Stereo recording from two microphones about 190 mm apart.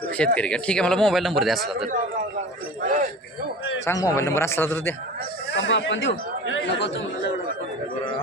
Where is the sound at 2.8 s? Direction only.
40° right (ahead or behind).